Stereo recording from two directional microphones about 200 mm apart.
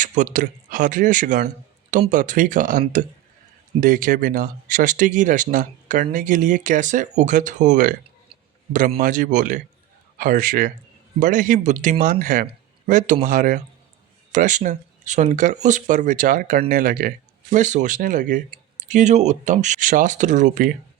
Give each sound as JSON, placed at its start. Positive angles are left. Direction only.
{"t": 0.0, "sound": "speech", "side_deg": -40}